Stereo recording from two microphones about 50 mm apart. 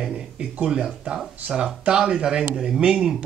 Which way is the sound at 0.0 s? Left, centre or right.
Centre.